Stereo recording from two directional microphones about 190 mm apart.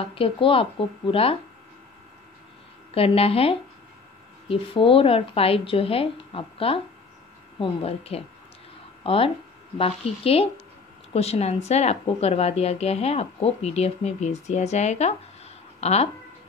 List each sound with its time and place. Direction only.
0.0 s speech: 30° left (ahead or behind)
2.9 s a woman's voice: 30° left (ahead or behind)